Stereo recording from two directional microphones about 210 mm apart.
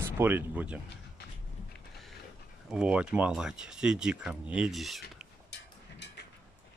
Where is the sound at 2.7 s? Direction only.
5° right (ahead or behind).